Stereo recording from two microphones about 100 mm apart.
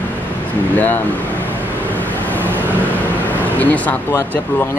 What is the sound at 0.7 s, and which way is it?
Speech, 20° left (ahead or behind).